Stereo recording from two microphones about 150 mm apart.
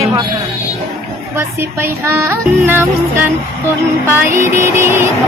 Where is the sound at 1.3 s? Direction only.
15° right (ahead or behind).